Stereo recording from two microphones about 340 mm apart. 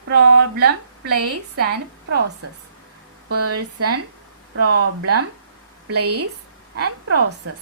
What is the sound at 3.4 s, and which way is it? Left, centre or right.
Speech, right.